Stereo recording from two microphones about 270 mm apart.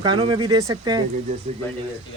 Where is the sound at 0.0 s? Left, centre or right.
Centre.